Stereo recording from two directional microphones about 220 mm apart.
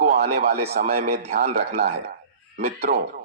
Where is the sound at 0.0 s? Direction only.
45° right (ahead or behind).